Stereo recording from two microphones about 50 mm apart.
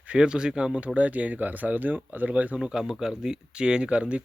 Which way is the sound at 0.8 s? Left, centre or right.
Right.